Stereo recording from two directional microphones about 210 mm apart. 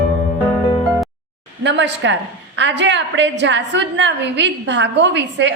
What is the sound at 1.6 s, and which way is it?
A woman's voice, 55° right (ahead or behind).